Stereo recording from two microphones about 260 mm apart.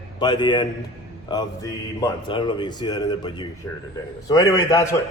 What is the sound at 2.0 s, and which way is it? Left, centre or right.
A man's voice, centre.